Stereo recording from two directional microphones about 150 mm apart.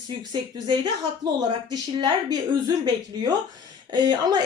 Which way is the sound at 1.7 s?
30° right (ahead or behind).